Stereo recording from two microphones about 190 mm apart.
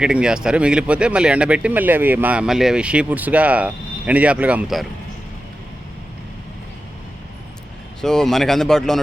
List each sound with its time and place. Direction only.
0.0 s speech: 5° right (ahead or behind)
8.0 s speech: centre (ahead or behind)